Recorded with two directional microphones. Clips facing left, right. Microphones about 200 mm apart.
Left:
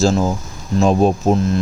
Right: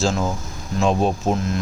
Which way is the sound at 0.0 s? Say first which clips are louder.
Left 6 dB; 35° left (ahead or behind).